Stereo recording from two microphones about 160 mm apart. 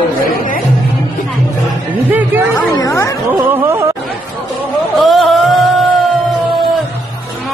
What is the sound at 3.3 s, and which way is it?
Speech, 10° right (ahead or behind).